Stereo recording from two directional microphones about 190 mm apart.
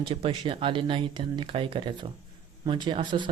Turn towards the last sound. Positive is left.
turn(degrees=-25)  # may be behind; listen again after turning